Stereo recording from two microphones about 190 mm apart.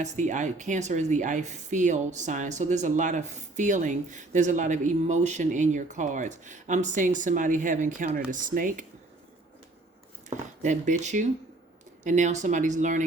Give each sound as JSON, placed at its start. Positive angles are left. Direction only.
{"t": 0.0, "sound": "a woman's voice", "side_deg": -40}
{"t": 10.2, "sound": "a woman's voice", "side_deg": -40}